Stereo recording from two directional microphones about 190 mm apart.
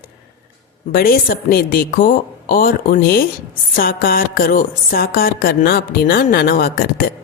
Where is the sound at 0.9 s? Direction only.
50° left (ahead or behind).